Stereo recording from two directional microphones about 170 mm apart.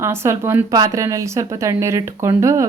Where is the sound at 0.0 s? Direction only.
15° right (ahead or behind).